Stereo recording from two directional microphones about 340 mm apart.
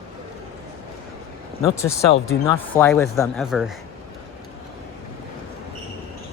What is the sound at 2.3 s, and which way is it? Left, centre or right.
Speech, left.